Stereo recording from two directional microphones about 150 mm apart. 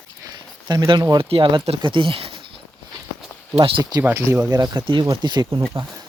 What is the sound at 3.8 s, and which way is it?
Speech, 25° right (ahead or behind).